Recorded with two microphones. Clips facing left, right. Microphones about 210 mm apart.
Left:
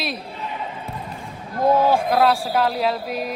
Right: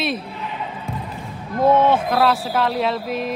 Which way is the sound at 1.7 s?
35° left (ahead or behind).